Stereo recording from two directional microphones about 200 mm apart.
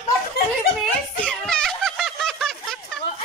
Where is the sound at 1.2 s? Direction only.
5° left (ahead or behind).